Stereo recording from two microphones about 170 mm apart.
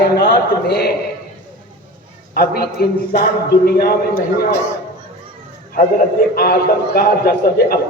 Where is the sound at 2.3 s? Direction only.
65° left (ahead or behind).